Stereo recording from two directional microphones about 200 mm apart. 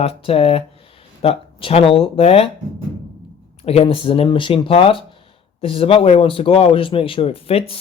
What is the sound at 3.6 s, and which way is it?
Speech, 30° left (ahead or behind).